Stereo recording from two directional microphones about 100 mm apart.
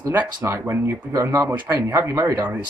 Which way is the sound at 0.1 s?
20° right (ahead or behind).